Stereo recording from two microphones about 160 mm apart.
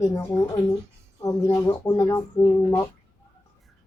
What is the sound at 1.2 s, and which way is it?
Speech, 20° left (ahead or behind).